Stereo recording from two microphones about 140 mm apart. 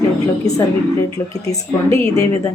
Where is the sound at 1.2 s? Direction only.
20° left (ahead or behind).